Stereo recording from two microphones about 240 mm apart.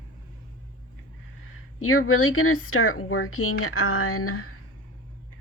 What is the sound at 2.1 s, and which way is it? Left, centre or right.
Speech, left.